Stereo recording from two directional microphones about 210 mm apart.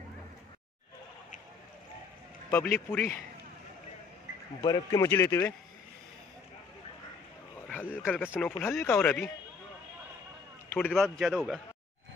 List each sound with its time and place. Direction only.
2.5 s speech: 10° left (ahead or behind)
4.6 s speech: 20° left (ahead or behind)
7.6 s a sound: 10° left (ahead or behind)
8.1 s speech: 10° left (ahead or behind)
10.8 s speech: centre (ahead or behind)